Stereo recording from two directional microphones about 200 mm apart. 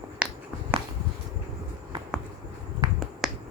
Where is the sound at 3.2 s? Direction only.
Centre (ahead or behind).